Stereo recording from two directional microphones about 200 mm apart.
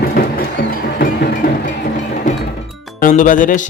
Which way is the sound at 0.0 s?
50° left (ahead or behind).